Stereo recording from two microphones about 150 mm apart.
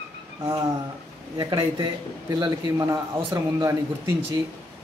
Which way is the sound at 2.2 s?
25° right (ahead or behind).